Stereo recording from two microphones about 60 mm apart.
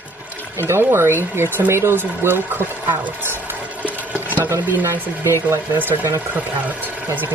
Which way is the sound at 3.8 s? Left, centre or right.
Right.